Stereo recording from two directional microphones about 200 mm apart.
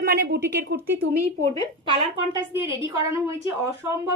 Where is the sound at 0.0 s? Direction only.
50° right (ahead or behind).